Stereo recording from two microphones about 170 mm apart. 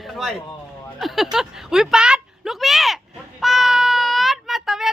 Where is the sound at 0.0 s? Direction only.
Centre (ahead or behind).